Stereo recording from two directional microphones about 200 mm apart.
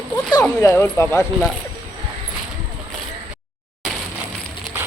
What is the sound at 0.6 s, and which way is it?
Speech, 15° left (ahead or behind).